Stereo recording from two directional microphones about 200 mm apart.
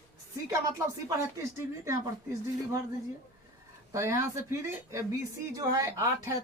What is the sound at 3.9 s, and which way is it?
Speech, 15° right (ahead or behind).